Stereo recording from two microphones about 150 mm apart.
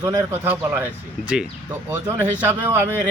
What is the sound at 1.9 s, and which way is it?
Speech, 15° right (ahead or behind).